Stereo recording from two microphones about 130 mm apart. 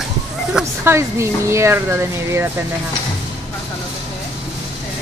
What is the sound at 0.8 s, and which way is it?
Speech, 20° right (ahead or behind).